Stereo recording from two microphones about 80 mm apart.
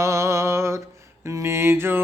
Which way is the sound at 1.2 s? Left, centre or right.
Right.